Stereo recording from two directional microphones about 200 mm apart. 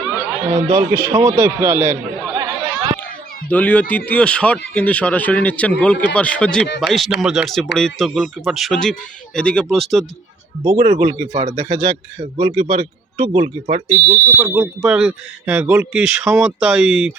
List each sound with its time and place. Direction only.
0.5 s a man's voice: 15° right (ahead or behind)
2.3 s chatter: 20° right (ahead or behind)
3.5 s speech: 5° left (ahead or behind)
10.6 s speech: 30° right (ahead or behind)
14.3 s speech: 5° right (ahead or behind)